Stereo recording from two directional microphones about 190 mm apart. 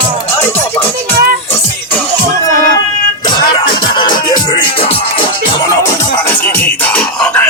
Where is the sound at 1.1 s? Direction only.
10° left (ahead or behind).